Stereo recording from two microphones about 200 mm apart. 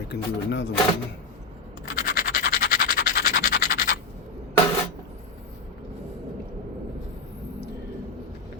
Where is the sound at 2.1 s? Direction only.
50° left (ahead or behind).